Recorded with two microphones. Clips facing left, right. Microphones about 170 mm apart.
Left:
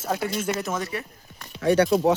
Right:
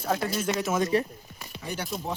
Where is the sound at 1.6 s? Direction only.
85° left.